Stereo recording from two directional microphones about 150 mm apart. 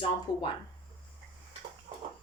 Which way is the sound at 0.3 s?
25° left (ahead or behind).